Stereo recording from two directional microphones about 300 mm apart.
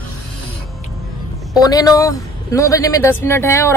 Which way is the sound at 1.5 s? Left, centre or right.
Centre.